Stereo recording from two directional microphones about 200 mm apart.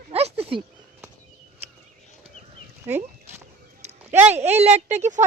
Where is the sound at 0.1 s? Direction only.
30° right (ahead or behind).